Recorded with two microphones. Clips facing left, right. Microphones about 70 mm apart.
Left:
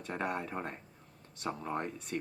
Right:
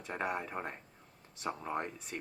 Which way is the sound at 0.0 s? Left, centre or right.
Centre.